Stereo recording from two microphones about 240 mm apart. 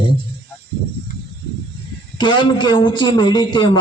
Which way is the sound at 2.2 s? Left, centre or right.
Centre.